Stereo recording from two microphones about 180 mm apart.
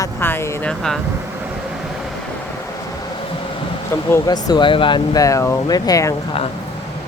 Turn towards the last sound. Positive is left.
turn(degrees=20)  # may be behind; listen again after turning